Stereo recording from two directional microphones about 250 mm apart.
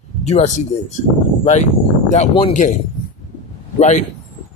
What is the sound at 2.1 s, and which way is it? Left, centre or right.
Speech, left.